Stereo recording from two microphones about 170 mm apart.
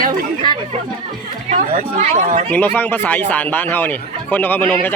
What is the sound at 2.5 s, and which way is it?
Speech, 10° left (ahead or behind).